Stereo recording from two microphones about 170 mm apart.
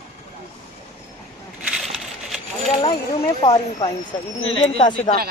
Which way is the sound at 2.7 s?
25° left (ahead or behind).